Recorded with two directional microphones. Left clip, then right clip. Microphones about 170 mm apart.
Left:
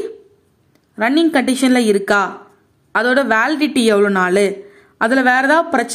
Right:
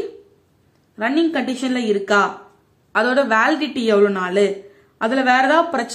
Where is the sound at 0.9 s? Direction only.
35° left (ahead or behind).